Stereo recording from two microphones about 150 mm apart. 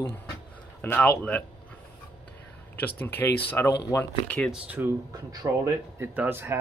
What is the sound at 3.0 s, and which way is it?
Speech, 15° left (ahead or behind).